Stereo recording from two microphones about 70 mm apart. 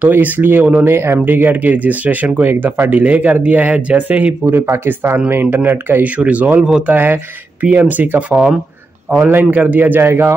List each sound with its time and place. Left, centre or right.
0.0 s speech: right
4.5 s speech: right